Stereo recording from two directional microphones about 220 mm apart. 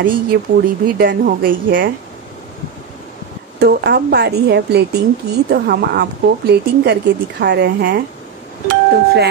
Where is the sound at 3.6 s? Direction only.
50° right (ahead or behind).